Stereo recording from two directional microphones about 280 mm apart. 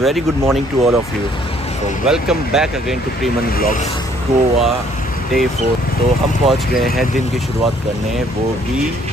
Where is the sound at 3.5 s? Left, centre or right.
Left.